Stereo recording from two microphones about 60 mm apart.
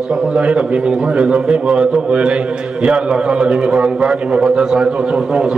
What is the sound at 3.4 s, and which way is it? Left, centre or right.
A man's voice, centre.